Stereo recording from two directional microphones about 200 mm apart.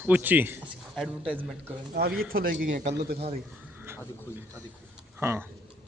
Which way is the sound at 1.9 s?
45° right (ahead or behind).